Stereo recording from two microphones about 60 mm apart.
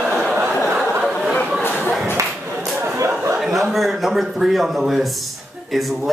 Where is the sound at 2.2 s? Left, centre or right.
Right.